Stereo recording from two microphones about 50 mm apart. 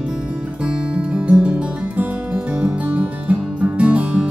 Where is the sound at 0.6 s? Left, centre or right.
Centre.